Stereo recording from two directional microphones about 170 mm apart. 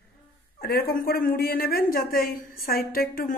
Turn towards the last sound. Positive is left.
turn(degrees=55)  # may be behind; listen again after turning